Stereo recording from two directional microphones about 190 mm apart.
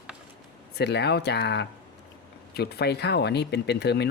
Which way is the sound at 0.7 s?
60° left (ahead or behind).